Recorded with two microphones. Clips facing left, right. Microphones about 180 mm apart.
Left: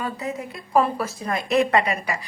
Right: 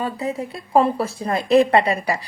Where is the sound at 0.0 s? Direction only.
30° right (ahead or behind).